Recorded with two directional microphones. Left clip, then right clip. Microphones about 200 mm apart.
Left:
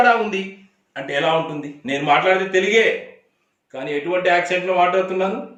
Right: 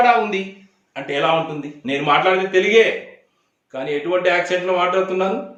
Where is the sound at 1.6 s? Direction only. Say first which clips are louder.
Right 1 dB; 20° right (ahead or behind).